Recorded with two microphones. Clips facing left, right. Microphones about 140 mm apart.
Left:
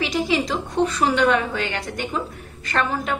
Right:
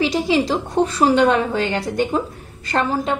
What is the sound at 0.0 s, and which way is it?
A woman's voice, 30° right (ahead or behind).